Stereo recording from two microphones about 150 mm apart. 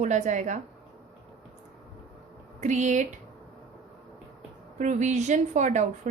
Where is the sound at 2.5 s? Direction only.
50° right (ahead or behind).